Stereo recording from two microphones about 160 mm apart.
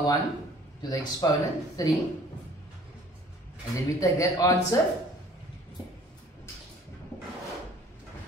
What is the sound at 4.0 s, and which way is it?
Speech, 20° left (ahead or behind).